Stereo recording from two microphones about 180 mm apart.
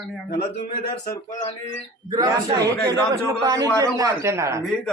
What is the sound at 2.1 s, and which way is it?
Speech, 20° right (ahead or behind).